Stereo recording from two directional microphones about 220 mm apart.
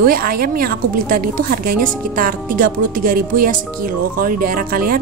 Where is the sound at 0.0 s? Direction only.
40° right (ahead or behind).